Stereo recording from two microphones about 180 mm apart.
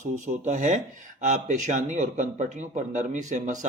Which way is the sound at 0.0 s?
40° right (ahead or behind).